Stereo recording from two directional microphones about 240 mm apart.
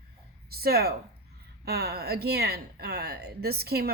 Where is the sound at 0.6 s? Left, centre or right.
Right.